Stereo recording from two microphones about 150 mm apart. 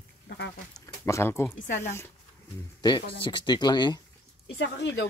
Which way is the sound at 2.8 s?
30° left (ahead or behind).